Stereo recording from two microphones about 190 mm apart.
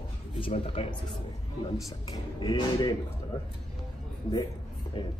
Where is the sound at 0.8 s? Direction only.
30° left (ahead or behind).